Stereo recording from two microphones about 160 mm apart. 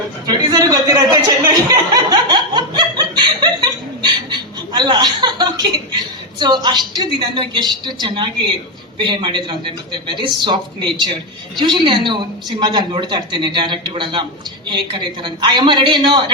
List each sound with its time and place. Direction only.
0.3 s chuckle: 25° right (ahead or behind)
6.4 s a woman's voice: 30° right (ahead or behind)